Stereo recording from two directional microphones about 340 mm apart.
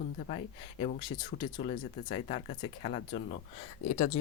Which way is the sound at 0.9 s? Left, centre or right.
Centre.